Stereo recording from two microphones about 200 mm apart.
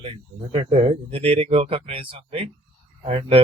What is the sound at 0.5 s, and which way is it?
Speech, 30° right (ahead or behind).